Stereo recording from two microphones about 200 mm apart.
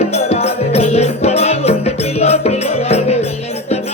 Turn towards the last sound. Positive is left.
turn(degrees=30)  # may be behind; listen again after turning